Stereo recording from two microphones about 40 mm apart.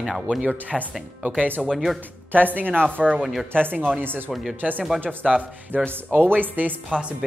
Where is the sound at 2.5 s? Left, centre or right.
Right.